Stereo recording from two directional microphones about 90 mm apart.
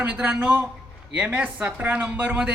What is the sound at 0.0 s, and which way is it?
Speech, 15° right (ahead or behind).